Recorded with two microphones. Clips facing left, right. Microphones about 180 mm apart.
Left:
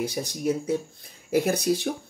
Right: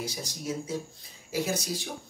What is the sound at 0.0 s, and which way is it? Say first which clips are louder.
Speech: left 9 dB; 60° left (ahead or behind).